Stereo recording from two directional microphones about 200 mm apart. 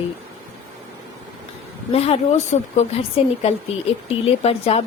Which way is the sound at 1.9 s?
30° left (ahead or behind).